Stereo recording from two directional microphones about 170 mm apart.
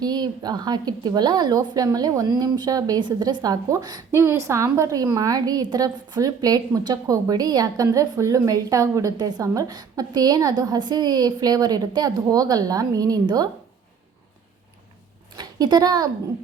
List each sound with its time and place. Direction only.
0.0 s a woman's voice: 25° right (ahead or behind)
15.4 s speech: 25° right (ahead or behind)